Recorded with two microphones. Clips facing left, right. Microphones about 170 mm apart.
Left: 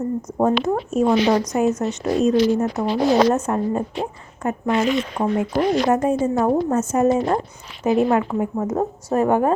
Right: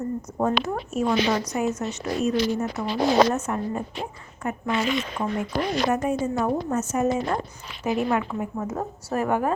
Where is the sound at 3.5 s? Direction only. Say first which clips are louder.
Left 6 dB; 35° left (ahead or behind).